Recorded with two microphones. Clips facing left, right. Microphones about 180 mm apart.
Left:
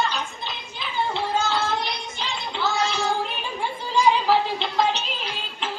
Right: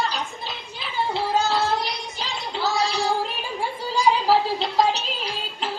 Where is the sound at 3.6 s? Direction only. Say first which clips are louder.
Left 2 dB; 35° right (ahead or behind).